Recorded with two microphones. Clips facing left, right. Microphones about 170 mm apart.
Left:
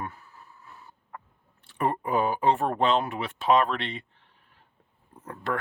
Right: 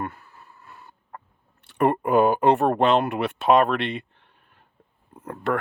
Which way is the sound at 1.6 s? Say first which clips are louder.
Right 7 dB; 70° right (ahead or behind).